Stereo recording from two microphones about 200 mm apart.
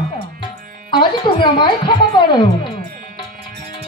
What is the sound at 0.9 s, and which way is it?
A woman's voice, 25° left (ahead or behind).